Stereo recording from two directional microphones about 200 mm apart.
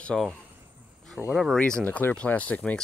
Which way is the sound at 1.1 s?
Centre (ahead or behind).